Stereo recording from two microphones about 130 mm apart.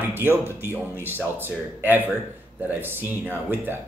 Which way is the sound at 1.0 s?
15° right (ahead or behind).